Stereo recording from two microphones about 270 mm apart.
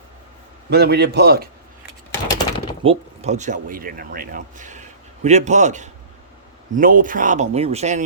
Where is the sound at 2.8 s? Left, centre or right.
Right.